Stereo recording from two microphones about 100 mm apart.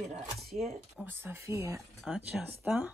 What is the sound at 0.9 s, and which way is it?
Speech, 20° right (ahead or behind).